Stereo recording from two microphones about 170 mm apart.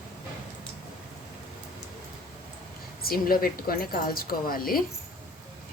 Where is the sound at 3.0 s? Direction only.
60° left (ahead or behind).